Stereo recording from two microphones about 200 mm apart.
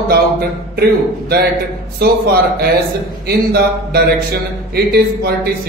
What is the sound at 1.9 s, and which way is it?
A man's voice, 55° right (ahead or behind).